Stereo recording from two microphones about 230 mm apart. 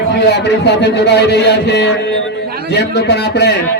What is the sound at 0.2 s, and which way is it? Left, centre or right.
A man's voice, left.